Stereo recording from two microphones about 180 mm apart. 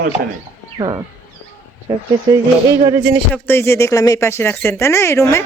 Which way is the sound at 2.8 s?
15° right (ahead or behind).